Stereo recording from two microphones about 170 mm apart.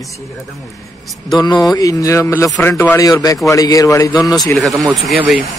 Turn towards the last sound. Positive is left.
turn(degrees=0)  # may be behind; listen again after turning